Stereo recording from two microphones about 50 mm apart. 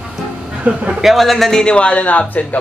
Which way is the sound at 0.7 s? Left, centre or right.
Right.